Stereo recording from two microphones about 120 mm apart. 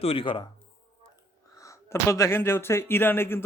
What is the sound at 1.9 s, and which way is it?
A man's voice, 25° left (ahead or behind).